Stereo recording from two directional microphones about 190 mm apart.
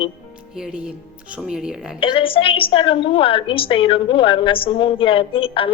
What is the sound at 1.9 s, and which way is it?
A woman's voice, 30° left (ahead or behind).